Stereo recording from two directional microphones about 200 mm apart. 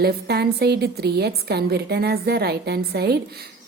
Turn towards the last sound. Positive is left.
turn(degrees=-55)  # may be behind; listen again after turning